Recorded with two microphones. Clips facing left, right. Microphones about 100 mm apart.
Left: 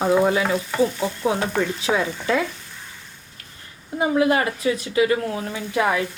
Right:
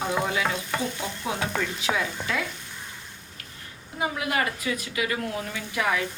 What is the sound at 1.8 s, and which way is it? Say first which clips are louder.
Stir: left 4 dB; 35° left (ahead or behind).